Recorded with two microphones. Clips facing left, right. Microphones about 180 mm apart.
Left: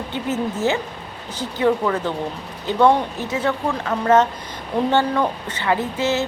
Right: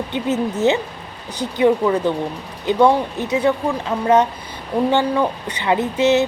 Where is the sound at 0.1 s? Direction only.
20° right (ahead or behind).